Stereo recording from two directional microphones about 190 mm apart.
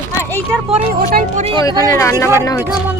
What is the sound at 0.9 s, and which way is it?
Speech, 50° right (ahead or behind).